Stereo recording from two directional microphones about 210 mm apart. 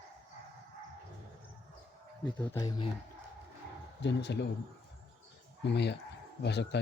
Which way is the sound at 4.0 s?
55° left (ahead or behind).